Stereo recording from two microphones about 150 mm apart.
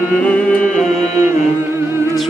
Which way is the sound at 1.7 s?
20° right (ahead or behind).